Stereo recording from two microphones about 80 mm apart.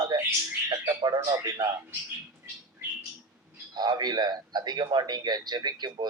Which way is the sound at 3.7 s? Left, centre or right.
Right.